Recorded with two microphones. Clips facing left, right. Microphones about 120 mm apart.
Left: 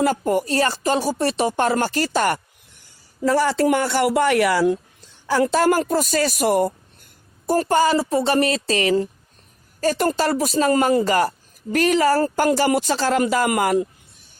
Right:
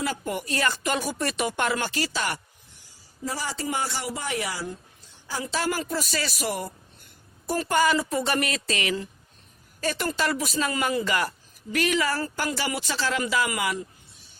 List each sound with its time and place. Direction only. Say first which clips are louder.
0.0 s speech: left 10 dB; 40° left (ahead or behind)
3.2 s speech: left 14 dB; 65° left (ahead or behind)